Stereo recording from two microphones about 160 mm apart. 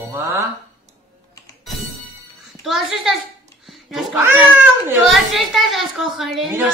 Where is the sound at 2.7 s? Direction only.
Centre (ahead or behind).